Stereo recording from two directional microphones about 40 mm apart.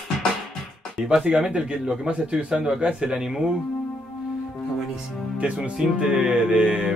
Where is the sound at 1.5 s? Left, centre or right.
Right.